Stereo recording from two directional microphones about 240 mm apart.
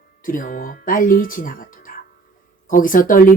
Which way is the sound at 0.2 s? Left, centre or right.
Left.